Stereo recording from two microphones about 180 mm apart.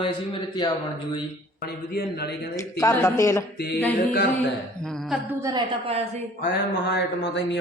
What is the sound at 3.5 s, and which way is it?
Speech, 65° left (ahead or behind).